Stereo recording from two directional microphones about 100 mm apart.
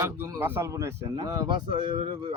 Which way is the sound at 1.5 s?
50° right (ahead or behind).